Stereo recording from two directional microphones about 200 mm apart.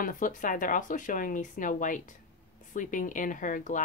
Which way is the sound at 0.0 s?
40° left (ahead or behind).